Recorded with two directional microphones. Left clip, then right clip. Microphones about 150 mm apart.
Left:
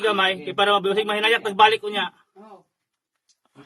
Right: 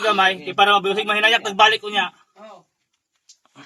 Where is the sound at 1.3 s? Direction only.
35° right (ahead or behind).